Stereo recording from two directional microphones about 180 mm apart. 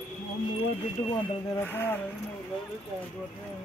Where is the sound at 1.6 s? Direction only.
10° left (ahead or behind).